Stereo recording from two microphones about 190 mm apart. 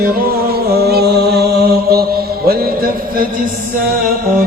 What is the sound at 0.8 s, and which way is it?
Mantra, 60° right (ahead or behind).